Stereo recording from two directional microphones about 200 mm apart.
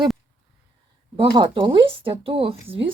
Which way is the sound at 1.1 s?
25° right (ahead or behind).